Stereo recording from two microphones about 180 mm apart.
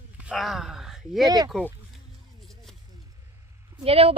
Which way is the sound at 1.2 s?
20° right (ahead or behind).